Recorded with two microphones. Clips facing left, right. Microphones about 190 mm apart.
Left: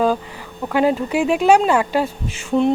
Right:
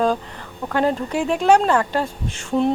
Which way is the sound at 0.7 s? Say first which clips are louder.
Left 3 dB; 10° left (ahead or behind).